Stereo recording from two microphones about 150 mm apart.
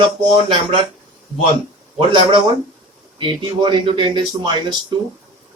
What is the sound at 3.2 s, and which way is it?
Speech, 35° right (ahead or behind).